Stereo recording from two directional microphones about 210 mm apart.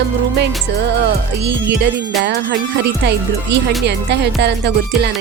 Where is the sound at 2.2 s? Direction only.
55° right (ahead or behind).